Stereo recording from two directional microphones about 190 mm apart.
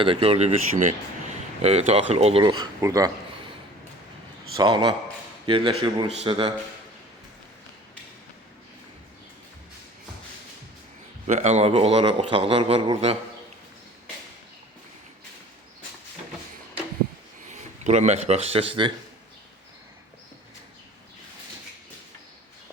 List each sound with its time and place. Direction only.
0.0 s a man's voice: 30° right (ahead or behind)
4.5 s speech: 25° right (ahead or behind)
11.3 s a man's voice: 35° right (ahead or behind)
17.5 s speech: 35° right (ahead or behind)